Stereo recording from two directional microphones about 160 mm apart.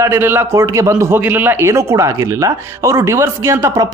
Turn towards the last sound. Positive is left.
turn(degrees=-15)  # may be behind; listen again after turning